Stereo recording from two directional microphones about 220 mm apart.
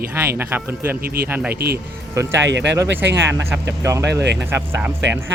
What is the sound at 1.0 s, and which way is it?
Speech, 45° right (ahead or behind).